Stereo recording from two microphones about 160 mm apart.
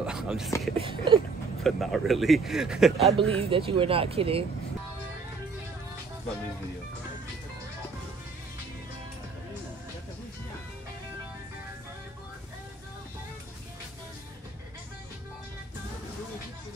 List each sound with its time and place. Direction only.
0.0 s a sound: 5° right (ahead or behind)
0.7 s speech: 35° right (ahead or behind)
1.6 s speech: centre (ahead or behind)
3.1 s speech: 35° right (ahead or behind)